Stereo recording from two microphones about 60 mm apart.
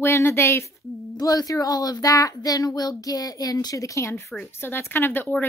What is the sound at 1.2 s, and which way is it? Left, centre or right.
A child's voice, left.